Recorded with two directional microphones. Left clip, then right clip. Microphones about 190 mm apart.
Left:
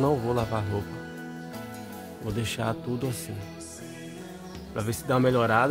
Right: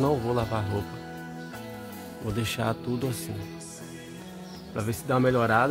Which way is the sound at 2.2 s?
5° left (ahead or behind).